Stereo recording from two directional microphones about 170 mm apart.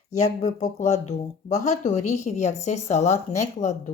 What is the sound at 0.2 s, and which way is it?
Speech, 40° left (ahead or behind).